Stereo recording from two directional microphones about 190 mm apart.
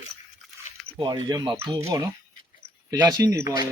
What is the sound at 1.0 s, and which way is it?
Speech, 20° right (ahead or behind).